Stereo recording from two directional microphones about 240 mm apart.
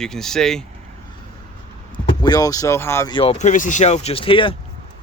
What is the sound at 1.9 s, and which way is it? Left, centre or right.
Speech, centre.